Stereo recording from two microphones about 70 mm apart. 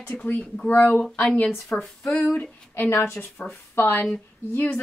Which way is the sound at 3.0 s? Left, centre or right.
Left.